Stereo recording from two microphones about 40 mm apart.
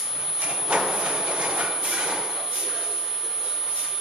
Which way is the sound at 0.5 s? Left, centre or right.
Centre.